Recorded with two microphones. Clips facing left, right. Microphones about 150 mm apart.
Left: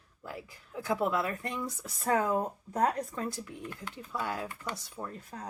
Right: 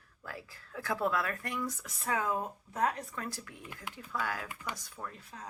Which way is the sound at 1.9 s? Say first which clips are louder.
Left 7 dB; 40° left (ahead or behind).